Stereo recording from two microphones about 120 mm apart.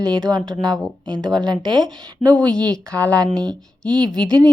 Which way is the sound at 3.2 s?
30° right (ahead or behind).